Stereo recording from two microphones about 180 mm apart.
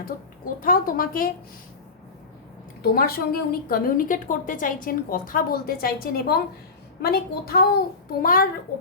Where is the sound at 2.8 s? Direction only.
60° left (ahead or behind).